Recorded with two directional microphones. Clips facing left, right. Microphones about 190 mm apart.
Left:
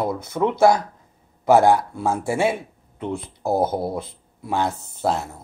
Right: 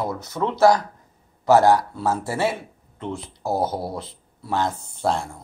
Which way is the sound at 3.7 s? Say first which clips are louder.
Left 4 dB; 20° left (ahead or behind).